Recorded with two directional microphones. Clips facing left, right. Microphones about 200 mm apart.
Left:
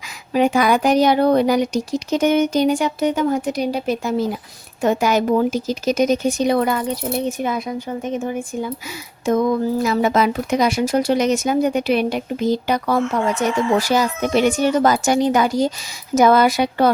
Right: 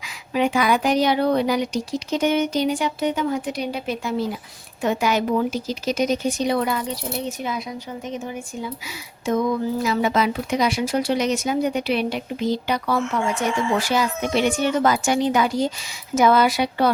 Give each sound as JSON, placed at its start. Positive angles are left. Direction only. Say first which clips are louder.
{"t": 0.3, "sound": "speech", "louder": "left 4 dB", "side_deg": 45}